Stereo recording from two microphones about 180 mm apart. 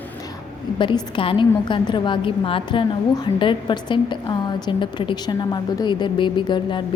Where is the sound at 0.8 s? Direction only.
25° left (ahead or behind).